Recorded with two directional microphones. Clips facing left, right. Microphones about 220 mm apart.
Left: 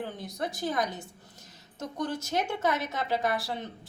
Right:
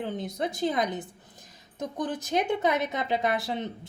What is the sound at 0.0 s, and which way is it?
A woman's voice, 20° right (ahead or behind).